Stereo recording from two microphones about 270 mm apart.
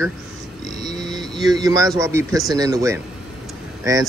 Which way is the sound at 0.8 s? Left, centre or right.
Centre.